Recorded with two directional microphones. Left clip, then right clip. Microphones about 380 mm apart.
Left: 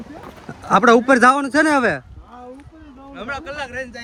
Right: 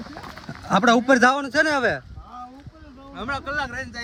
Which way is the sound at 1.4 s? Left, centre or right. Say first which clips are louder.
Left 4 dB; centre.